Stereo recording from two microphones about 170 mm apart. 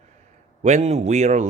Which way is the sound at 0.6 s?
40° right (ahead or behind).